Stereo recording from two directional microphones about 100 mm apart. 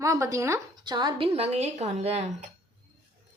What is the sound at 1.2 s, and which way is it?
A woman's voice, 85° right.